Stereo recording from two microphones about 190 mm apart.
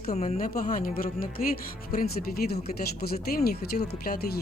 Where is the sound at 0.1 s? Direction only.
35° left (ahead or behind).